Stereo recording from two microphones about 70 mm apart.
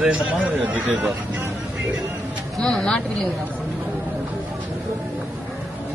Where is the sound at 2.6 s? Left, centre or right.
Centre.